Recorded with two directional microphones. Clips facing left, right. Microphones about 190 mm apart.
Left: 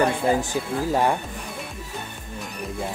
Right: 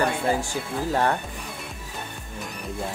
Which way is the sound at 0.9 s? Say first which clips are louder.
Left 2 dB; 10° left (ahead or behind).